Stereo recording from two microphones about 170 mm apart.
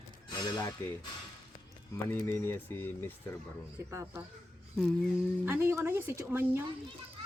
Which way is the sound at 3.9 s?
15° right (ahead or behind).